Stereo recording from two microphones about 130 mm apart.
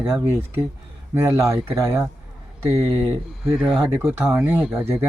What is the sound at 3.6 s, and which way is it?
Speech, centre (ahead or behind).